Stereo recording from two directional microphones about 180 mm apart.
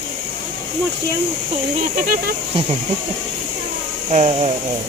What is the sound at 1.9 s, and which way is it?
Speech, 50° right (ahead or behind).